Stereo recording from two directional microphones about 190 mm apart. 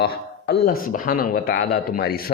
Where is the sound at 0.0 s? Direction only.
55° left (ahead or behind).